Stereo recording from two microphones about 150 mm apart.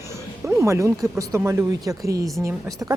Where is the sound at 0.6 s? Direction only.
20° right (ahead or behind).